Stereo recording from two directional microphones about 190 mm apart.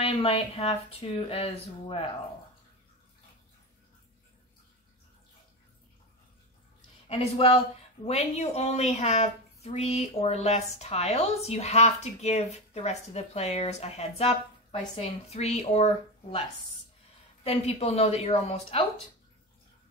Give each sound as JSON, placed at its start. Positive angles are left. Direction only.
{"t": 0.0, "sound": "speech", "side_deg": 30}
{"t": 7.1, "sound": "speech", "side_deg": 30}